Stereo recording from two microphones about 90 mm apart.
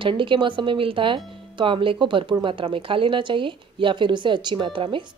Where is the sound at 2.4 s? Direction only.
75° right (ahead or behind); by 5.0 s 60° right (ahead or behind).